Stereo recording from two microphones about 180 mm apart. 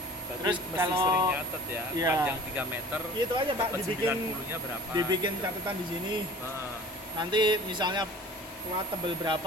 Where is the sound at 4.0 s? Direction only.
10° right (ahead or behind).